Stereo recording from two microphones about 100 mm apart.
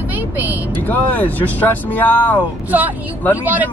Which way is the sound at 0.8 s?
15° left (ahead or behind).